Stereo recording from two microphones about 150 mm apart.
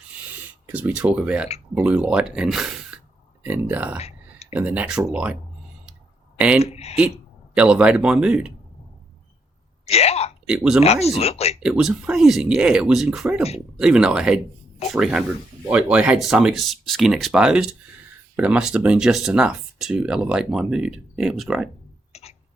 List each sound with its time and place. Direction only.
0.7 s speech: 10° right (ahead or behind)
6.6 s speech: 45° left (ahead or behind)
7.5 s speech: 5° right (ahead or behind)
9.8 s hiccup: 45° left (ahead or behind)
10.4 s speech: 5° right (ahead or behind)
10.8 s speech: 45° left (ahead or behind)
11.6 s speech: 5° right (ahead or behind)
22.1 s cough: 45° left (ahead or behind)